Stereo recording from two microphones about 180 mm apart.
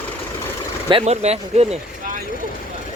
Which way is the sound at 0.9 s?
35° right (ahead or behind).